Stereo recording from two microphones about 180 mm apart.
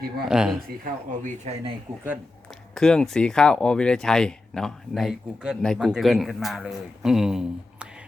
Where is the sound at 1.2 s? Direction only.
35° right (ahead or behind).